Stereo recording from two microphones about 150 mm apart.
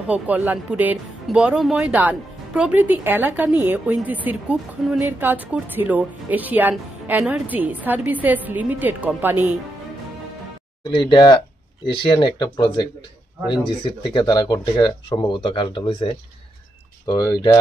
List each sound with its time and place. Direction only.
0.1 s speech: 10° right (ahead or behind)
11.0 s speech: 30° left (ahead or behind)
13.5 s speech: 30° left (ahead or behind)
17.0 s speech: 25° left (ahead or behind)